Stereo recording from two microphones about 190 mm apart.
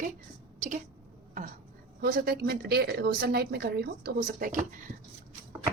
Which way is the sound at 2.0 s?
50° right (ahead or behind).